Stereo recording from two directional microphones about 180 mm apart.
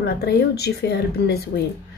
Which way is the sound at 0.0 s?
65° left (ahead or behind).